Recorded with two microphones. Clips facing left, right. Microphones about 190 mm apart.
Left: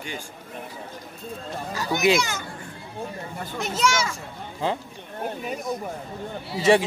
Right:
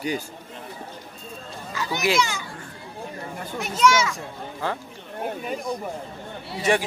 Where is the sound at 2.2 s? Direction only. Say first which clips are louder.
Right 3 dB; 45° left (ahead or behind).